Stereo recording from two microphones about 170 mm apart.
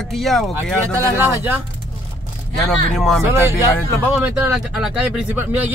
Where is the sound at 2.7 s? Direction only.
Centre (ahead or behind).